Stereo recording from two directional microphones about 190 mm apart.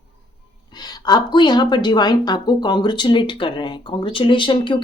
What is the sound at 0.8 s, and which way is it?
Speech, 20° left (ahead or behind).